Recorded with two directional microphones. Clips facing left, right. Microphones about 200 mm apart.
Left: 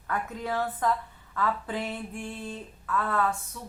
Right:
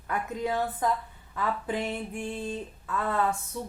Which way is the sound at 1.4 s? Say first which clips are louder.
Even; 15° right (ahead or behind).